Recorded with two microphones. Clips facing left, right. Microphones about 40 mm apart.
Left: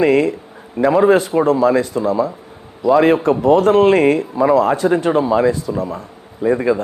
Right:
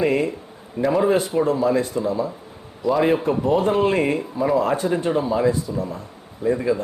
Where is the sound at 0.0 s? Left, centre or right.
Left.